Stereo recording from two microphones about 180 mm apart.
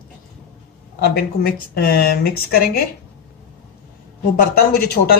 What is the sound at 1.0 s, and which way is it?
A woman's voice, 60° left (ahead or behind).